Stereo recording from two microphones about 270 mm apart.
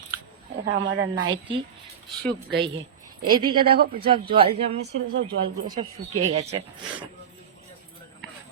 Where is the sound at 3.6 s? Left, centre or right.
Right.